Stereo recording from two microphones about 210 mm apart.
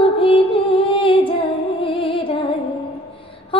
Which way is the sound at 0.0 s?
25° left (ahead or behind).